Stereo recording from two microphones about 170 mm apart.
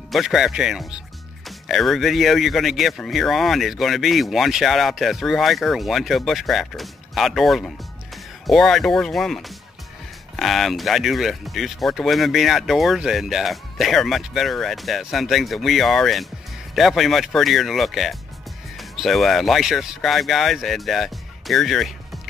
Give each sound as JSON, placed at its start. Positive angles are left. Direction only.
{"t": 0.1, "sound": "speech", "side_deg": 0}